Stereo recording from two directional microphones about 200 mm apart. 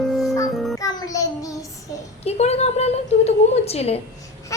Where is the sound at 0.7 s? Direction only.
15° left (ahead or behind).